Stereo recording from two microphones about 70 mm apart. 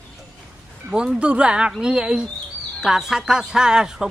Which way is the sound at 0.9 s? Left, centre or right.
Centre.